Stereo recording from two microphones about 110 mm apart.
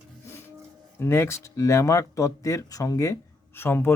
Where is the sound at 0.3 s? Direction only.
20° left (ahead or behind).